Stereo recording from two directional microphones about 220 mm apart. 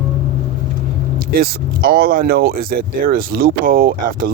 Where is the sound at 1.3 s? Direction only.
40° right (ahead or behind).